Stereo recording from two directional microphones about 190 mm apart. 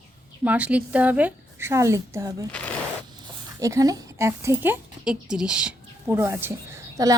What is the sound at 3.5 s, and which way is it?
A woman's voice, 15° right (ahead or behind).